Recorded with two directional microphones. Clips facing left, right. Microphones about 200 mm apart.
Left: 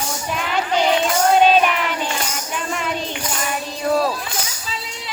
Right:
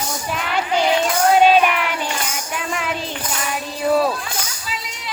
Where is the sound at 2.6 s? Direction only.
5° right (ahead or behind).